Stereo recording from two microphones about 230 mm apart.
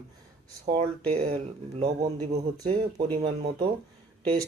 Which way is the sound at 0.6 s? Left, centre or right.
Right.